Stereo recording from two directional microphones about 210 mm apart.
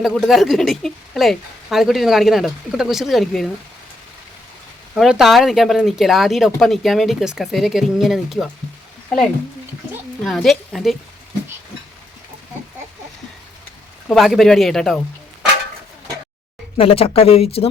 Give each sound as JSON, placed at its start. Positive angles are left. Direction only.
{"t": 0.0, "sound": "speech", "side_deg": 0}
{"t": 4.9, "sound": "speech", "side_deg": 0}
{"t": 14.1, "sound": "speech", "side_deg": 0}
{"t": 16.7, "sound": "speech", "side_deg": 25}